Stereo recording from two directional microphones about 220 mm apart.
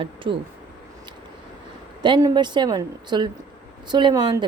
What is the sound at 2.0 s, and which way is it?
Speech, 20° right (ahead or behind).